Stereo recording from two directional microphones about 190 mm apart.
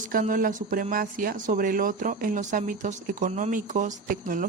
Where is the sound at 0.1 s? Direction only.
45° right (ahead or behind).